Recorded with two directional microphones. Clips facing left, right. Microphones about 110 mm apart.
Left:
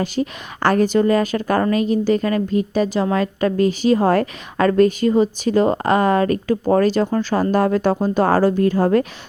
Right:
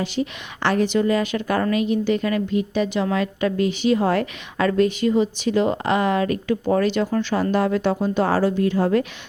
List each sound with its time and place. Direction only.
0.0 s a woman's voice: 45° left (ahead or behind)